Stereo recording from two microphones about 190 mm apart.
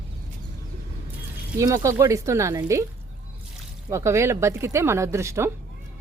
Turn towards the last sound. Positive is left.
turn(degrees=-15)  # may be behind; listen again after turning